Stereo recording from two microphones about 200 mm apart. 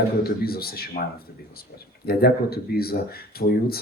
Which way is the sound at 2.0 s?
50° left (ahead or behind).